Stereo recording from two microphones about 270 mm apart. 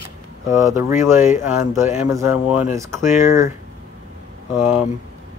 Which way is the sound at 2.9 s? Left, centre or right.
Left.